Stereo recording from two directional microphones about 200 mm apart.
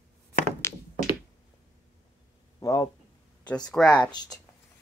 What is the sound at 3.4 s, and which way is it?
Speech, 5° left (ahead or behind).